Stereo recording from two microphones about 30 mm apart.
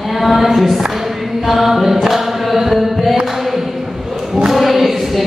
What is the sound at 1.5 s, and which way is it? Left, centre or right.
Mantra, centre.